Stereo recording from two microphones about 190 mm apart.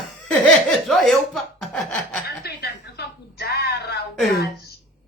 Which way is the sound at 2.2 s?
60° left (ahead or behind).